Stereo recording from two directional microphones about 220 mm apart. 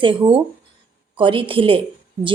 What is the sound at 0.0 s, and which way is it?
Speech, 25° right (ahead or behind).